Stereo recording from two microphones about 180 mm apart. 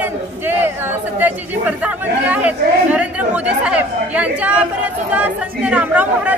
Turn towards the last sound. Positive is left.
turn(degrees=-10)  # may be behind; listen again after turning